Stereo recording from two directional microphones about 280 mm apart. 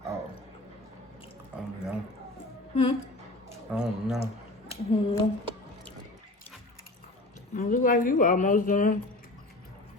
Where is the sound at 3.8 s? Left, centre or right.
Centre.